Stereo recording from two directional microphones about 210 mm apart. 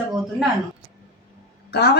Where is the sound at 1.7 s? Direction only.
50° left (ahead or behind).